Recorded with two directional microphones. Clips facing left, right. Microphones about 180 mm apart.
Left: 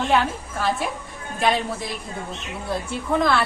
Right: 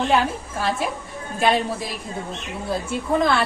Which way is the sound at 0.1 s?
Centre (ahead or behind).